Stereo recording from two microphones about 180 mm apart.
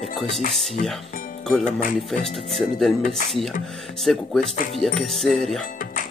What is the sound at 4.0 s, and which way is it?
Speech, centre (ahead or behind).